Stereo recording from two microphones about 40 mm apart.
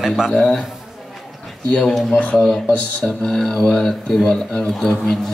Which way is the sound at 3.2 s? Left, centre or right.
Centre.